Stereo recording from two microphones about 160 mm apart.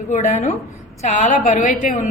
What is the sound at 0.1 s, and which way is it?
A woman's voice, 50° left (ahead or behind).